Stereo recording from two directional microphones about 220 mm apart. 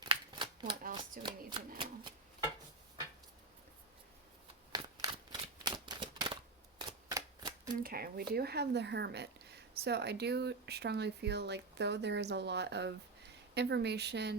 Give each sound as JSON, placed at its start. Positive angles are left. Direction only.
{"t": 0.0, "sound": "shuffling cards", "side_deg": -25}
{"t": 1.2, "sound": "speech", "side_deg": -20}
{"t": 4.7, "sound": "typewriter", "side_deg": -20}
{"t": 6.7, "sound": "shuffling cards", "side_deg": -15}
{"t": 7.8, "sound": "speech", "side_deg": -40}